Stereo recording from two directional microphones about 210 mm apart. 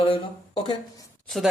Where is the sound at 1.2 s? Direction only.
Centre (ahead or behind).